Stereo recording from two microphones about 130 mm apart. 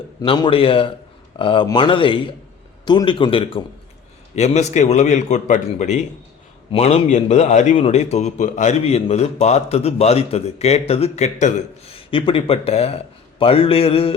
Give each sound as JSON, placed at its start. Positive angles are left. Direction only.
{"t": 0.3, "sound": "a man's voice", "side_deg": 40}
{"t": 4.4, "sound": "a man's voice", "side_deg": 60}
{"t": 6.7, "sound": "a man's voice", "side_deg": 55}
{"t": 11.9, "sound": "speech", "side_deg": 45}